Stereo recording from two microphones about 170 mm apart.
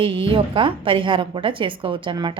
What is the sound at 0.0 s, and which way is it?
A woman's voice, 30° right (ahead or behind).